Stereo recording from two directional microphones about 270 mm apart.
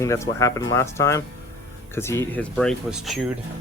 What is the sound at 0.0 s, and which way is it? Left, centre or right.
Speech, centre.